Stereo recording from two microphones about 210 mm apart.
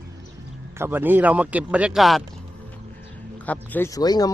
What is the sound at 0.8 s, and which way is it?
Speech, 10° right (ahead or behind).